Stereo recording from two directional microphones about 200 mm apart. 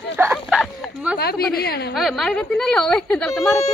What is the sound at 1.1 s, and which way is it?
Speech, 50° left (ahead or behind).